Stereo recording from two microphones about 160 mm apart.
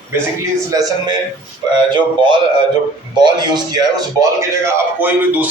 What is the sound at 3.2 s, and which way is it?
A man's voice, 25° right (ahead or behind).